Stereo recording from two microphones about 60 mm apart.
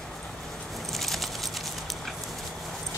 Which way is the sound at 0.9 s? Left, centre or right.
Centre.